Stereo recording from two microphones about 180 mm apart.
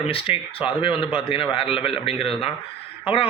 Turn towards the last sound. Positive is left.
turn(degrees=30)  # may be behind; listen again after turning